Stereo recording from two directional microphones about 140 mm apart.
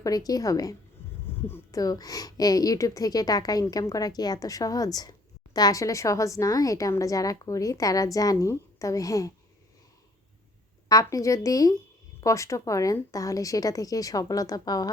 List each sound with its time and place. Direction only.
0.0 s a woman's voice: 25° left (ahead or behind)
10.8 s a woman's voice: 25° left (ahead or behind)